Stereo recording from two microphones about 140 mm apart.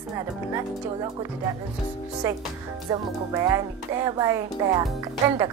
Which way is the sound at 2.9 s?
25° right (ahead or behind).